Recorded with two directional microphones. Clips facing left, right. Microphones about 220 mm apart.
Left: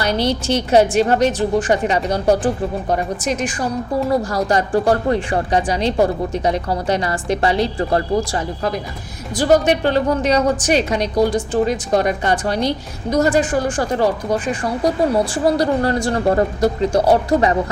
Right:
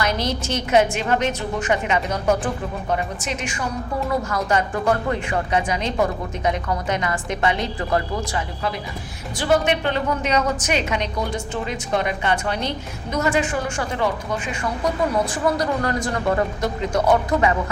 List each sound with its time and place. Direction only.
0.0 s a woman's voice: 35° left (ahead or behind)